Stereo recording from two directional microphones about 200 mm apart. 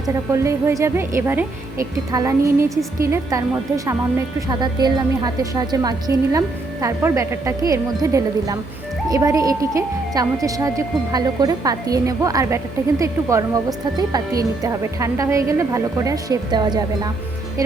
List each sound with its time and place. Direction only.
0.0 s a woman's voice: 15° right (ahead or behind)